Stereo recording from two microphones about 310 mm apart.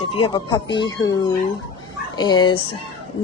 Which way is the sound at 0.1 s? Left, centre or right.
Centre.